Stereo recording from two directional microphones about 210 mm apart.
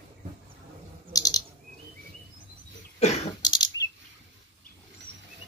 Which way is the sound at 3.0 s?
30° left (ahead or behind).